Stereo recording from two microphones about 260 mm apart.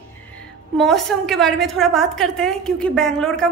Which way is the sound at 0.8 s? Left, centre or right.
Centre.